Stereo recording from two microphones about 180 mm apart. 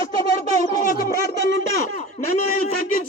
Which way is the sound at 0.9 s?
55° left (ahead or behind).